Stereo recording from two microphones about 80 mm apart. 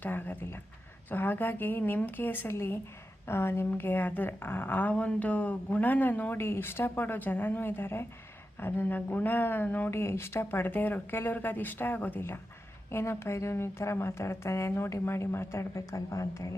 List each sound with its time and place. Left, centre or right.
0.0 s speech: left
12.9 s a woman's voice: left